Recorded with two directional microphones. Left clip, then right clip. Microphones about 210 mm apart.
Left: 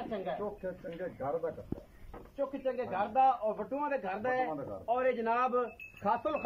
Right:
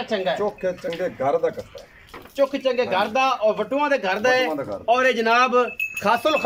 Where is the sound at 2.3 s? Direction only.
45° right (ahead or behind).